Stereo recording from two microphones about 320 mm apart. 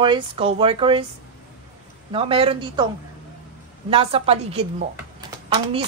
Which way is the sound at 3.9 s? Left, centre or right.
Centre.